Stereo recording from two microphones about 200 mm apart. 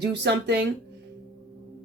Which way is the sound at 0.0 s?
60° right (ahead or behind).